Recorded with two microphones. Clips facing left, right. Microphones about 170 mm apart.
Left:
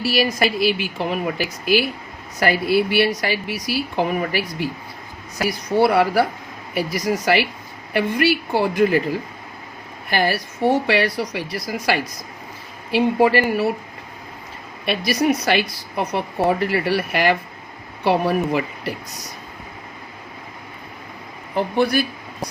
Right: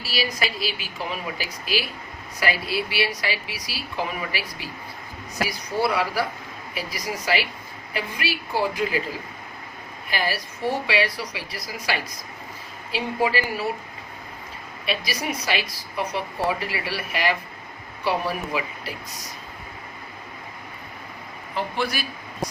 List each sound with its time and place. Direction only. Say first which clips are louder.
0.0 s speech: left 8 dB; 60° left (ahead or behind)
7.3 s speech: left 6 dB; 60° left (ahead or behind)
10.1 s speech: left 7 dB; 60° left (ahead or behind)
14.8 s speech: left 9 dB; 60° left (ahead or behind)
21.5 s speech: left 8 dB; 55° left (ahead or behind)